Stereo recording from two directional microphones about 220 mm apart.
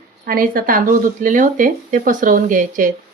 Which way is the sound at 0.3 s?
40° right (ahead or behind).